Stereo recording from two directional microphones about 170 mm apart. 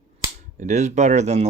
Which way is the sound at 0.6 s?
45° right (ahead or behind).